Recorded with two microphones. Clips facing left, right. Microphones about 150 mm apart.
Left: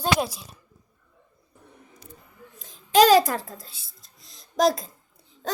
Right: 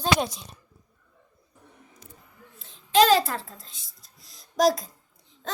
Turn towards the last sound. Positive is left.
turn(degrees=0)  # may be behind; listen again after turning